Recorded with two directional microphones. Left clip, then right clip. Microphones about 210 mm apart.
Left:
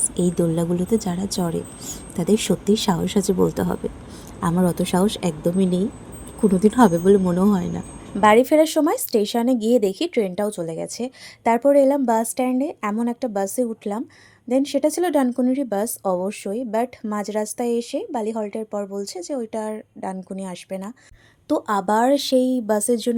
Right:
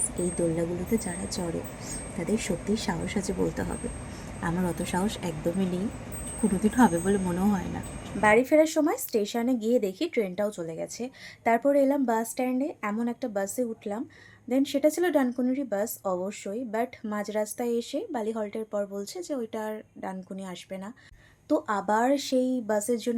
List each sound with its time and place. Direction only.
0.3 s speech: 45° left (ahead or behind); by 7.6 s 25° left (ahead or behind)
8.2 s speech: 40° left (ahead or behind)